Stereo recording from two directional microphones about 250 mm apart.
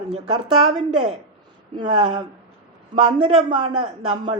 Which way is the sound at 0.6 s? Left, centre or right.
Centre.